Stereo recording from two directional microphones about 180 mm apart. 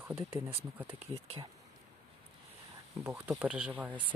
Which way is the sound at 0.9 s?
30° right (ahead or behind).